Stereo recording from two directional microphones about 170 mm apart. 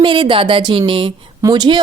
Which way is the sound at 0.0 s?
30° right (ahead or behind).